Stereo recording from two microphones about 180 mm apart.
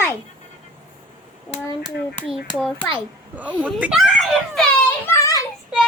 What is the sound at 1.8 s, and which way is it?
A child's voice, centre (ahead or behind).